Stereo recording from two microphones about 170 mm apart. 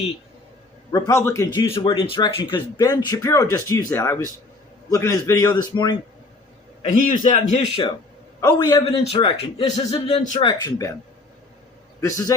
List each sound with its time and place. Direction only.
0.9 s speech: 20° left (ahead or behind)
1.7 s speech: 30° left (ahead or behind)
6.8 s a man's voice: 50° left (ahead or behind); by 7.9 s 35° left (ahead or behind)
8.4 s speech: 20° left (ahead or behind)
9.1 s speech: 35° left (ahead or behind)
10.4 s speech: 20° left (ahead or behind)
11.9 s a man's voice: 20° left (ahead or behind)